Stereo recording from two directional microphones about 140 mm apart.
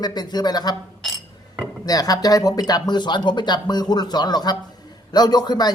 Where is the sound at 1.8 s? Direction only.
25° left (ahead or behind).